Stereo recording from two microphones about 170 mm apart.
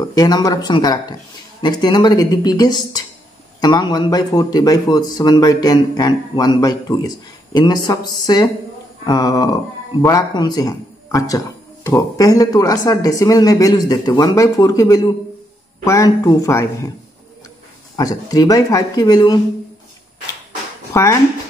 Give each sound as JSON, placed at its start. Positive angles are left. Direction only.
{"t": 0.0, "sound": "speech", "side_deg": 20}
{"t": 17.9, "sound": "speech", "side_deg": 20}
{"t": 20.9, "sound": "speech", "side_deg": 20}